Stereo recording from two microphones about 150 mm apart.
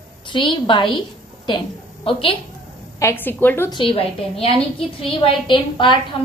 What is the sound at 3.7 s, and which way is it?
A woman's voice, 35° left (ahead or behind).